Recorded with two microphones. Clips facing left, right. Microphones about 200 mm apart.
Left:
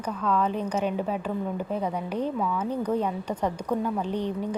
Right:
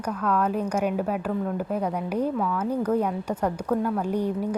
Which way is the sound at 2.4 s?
10° left (ahead or behind).